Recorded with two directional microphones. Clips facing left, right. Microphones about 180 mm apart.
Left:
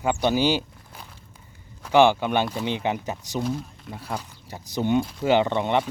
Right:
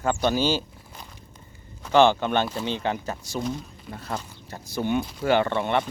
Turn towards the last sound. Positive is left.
turn(degrees=15)  # may be behind; listen again after turning